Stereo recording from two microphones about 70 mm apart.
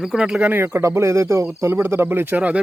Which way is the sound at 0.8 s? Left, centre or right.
Right.